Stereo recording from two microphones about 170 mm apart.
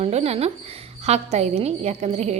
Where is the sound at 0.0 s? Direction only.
35° right (ahead or behind).